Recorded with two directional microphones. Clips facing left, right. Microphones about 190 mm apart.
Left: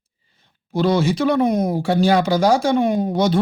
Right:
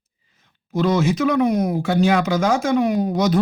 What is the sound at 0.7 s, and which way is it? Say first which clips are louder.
Speech: left 1 dB; 30° left (ahead or behind).